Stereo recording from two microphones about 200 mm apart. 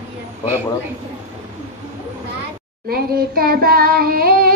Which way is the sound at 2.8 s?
50° right (ahead or behind).